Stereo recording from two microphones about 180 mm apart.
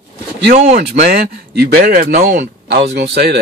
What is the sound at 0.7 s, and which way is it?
Speech, 55° right (ahead or behind).